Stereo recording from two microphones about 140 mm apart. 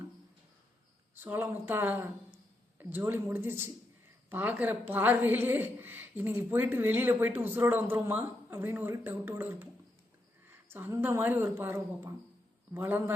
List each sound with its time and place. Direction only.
1.1 s a woman's voice: 15° right (ahead or behind)